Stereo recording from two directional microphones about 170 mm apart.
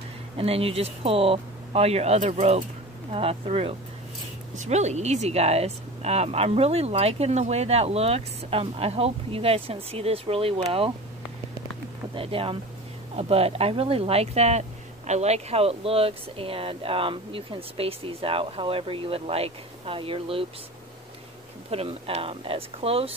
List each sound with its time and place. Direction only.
0.4 s speech: 35° right (ahead or behind)
12.2 s speech: 30° right (ahead or behind)
21.6 s speech: 35° right (ahead or behind)